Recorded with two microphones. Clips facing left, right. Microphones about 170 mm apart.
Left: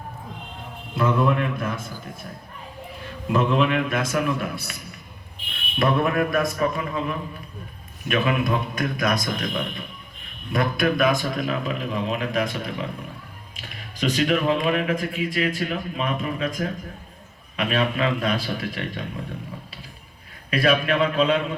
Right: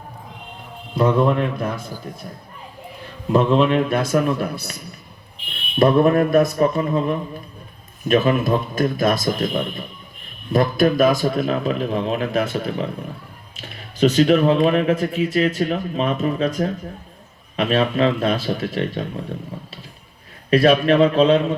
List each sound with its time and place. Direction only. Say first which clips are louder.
0.9 s speech: right 4 dB; 30° right (ahead or behind)
3.3 s speech: right 5 dB; 35° right (ahead or behind)
5.8 s a man's voice: right 7 dB; 30° right (ahead or behind)
6.7 s speech: right 7 dB; 35° right (ahead or behind)
8.4 s a man's voice: right 5 dB; 25° right (ahead or behind)
10.8 s speech: right 3 dB; 40° right (ahead or behind)
20.5 s speech: right 6 dB; 40° right (ahead or behind)